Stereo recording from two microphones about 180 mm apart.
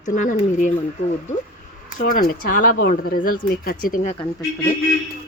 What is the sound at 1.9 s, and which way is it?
Speech, 50° left (ahead or behind).